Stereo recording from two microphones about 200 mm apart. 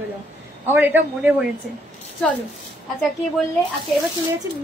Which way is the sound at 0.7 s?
10° right (ahead or behind).